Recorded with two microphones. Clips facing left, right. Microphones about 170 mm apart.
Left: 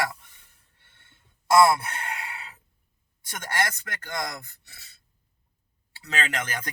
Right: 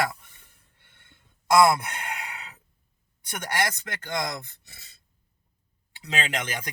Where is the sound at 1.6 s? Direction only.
15° right (ahead or behind).